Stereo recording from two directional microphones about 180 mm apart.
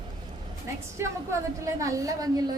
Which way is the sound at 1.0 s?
15° right (ahead or behind).